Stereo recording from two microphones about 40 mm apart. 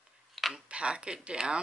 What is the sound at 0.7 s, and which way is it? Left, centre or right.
Speech, right.